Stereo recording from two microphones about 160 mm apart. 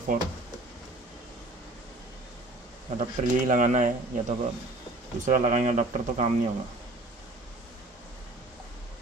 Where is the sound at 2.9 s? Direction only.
55° right (ahead or behind).